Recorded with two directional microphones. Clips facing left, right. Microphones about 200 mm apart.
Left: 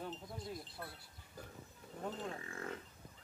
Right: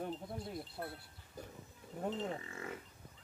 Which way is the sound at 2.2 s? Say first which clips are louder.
Right 2 dB; 5° right (ahead or behind).